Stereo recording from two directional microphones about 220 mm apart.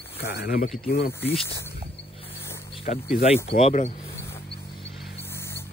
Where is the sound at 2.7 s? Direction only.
25° left (ahead or behind).